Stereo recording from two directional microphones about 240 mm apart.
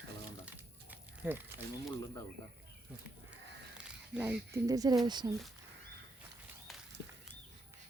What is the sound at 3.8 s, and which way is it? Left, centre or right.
Speech, centre.